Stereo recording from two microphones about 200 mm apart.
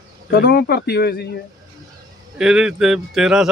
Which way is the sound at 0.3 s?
55° left (ahead or behind).